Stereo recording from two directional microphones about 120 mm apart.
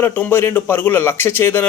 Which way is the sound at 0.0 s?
15° left (ahead or behind).